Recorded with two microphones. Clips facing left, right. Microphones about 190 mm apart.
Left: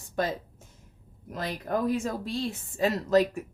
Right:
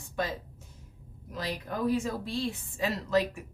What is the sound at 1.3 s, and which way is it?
A woman's voice, 50° left (ahead or behind).